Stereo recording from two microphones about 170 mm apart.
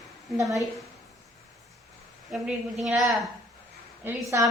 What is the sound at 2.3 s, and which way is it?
A woman's voice, centre (ahead or behind).